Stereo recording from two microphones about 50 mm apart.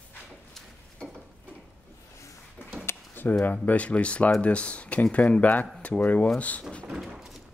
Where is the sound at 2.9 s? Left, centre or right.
Left.